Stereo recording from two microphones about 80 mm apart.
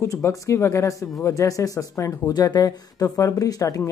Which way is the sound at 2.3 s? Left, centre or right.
Left.